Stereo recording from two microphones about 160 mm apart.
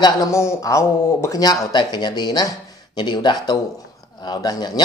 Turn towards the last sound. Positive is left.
turn(degrees=25)  # may be behind; listen again after turning